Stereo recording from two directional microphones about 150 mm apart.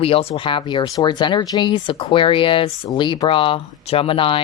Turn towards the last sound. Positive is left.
turn(degrees=35)  # may be behind; listen again after turning